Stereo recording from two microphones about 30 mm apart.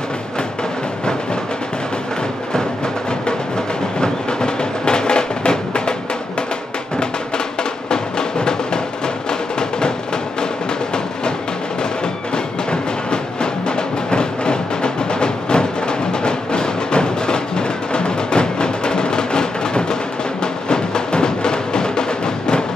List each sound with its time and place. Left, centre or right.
4.0 s music: left
7.9 s music: left
9.6 s music: left
13.1 s music: left